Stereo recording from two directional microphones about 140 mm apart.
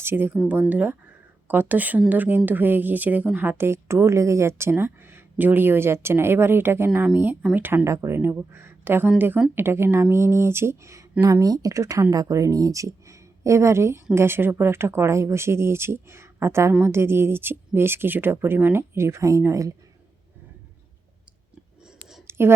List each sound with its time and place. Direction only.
0.0 s speech: 15° right (ahead or behind)
22.3 s whispering: 15° right (ahead or behind)